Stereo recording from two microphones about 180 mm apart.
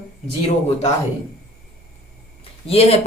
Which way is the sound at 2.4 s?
35° left (ahead or behind).